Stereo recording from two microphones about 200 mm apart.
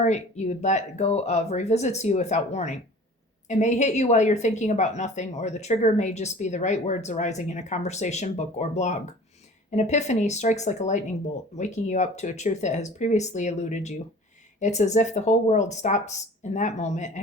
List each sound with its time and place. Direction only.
0.0 s speech: 35° left (ahead or behind)